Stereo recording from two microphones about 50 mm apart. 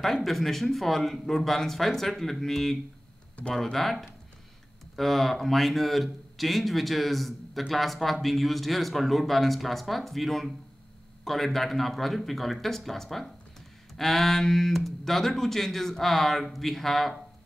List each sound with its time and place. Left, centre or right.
0.0 s speech: centre